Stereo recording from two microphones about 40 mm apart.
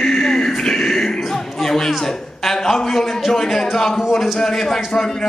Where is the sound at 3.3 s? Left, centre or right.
Centre.